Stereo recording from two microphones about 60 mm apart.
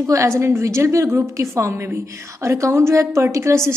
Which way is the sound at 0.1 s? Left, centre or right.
Right.